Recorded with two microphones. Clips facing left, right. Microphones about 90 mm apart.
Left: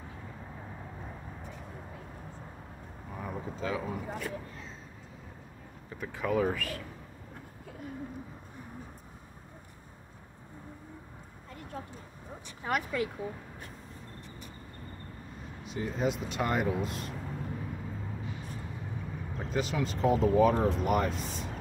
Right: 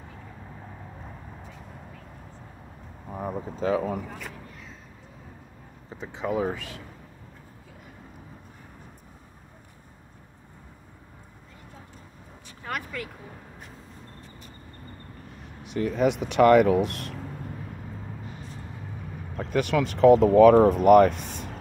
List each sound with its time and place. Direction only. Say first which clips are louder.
3.1 s speech: right 6 dB; 40° right (ahead or behind)
5.9 s speech: right 2 dB; 20° right (ahead or behind)
12.6 s speech: left 3 dB; 20° left (ahead or behind)
15.6 s speech: right 8 dB; 65° right (ahead or behind)
19.3 s speech: right 8 dB; 65° right (ahead or behind)